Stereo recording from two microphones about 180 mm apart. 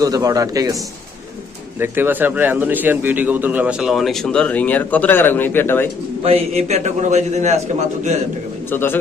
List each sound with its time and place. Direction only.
0.0 s a man's voice: 20° right (ahead or behind)
1.8 s a man's voice: 10° right (ahead or behind); by 5.9 s 10° left (ahead or behind)
6.2 s a man's voice: 35° right (ahead or behind)
8.7 s speech: 10° left (ahead or behind)